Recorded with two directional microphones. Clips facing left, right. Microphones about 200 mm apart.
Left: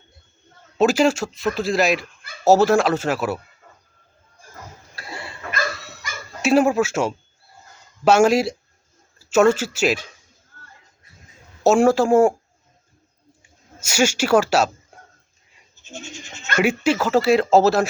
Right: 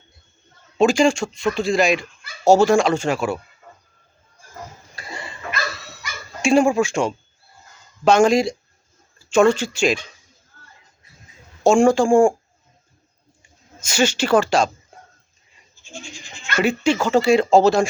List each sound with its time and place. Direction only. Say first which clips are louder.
0.8 s speech: right 1 dB; 5° left (ahead or behind)
4.9 s a sound: even; 5° left (ahead or behind)
5.5 s dog: left 2 dB; 50° left (ahead or behind)
6.4 s speech: right 1 dB; 5° left (ahead or behind)
10.5 s a sound: left 2 dB; 55° left (ahead or behind)
11.6 s speech: right 1 dB; 5° left (ahead or behind)
13.4 s speech: even; 10° left (ahead or behind)
15.9 s speech: left 2 dB; 25° left (ahead or behind)
16.6 s speech: even; 5° left (ahead or behind)